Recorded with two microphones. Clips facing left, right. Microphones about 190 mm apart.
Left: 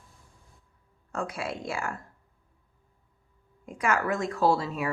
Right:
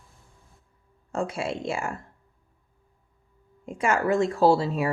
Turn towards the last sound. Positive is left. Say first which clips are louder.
# right 5 dB
turn(degrees=-30)  # may be behind; listen again after turning